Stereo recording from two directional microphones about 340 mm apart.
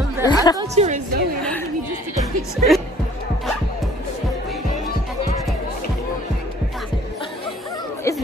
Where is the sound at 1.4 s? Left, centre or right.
Centre.